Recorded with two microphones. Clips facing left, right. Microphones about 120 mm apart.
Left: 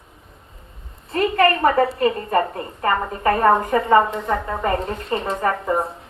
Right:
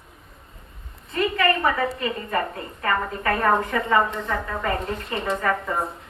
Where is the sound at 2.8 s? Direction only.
30° left (ahead or behind).